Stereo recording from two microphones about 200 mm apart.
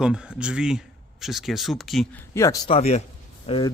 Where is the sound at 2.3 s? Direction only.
15° left (ahead or behind).